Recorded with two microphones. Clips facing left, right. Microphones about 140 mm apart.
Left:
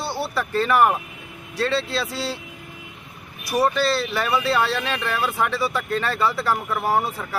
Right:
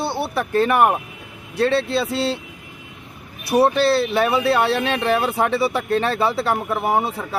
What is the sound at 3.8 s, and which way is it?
Speech, 60° right (ahead or behind).